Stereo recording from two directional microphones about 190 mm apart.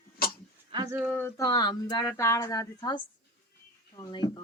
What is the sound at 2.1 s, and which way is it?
A woman's voice, 15° left (ahead or behind).